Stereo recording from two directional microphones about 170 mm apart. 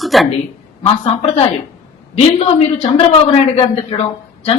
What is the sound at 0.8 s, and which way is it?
A woman's voice, 35° left (ahead or behind).